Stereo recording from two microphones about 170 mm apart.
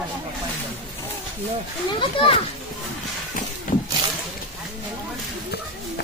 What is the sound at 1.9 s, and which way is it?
Speech, 30° left (ahead or behind).